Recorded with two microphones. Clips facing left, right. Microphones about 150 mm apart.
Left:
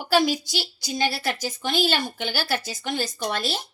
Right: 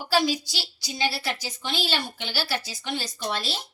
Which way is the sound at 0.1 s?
50° left (ahead or behind).